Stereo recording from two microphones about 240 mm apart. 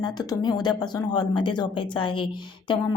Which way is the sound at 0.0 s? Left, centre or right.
Centre.